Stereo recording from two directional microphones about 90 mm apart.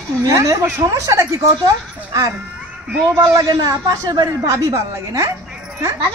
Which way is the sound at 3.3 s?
40° right (ahead or behind).